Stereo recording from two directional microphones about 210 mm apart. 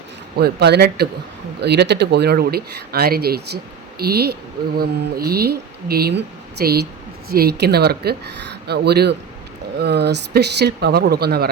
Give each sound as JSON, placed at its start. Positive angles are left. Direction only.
{"t": 0.3, "sound": "speech", "side_deg": -50}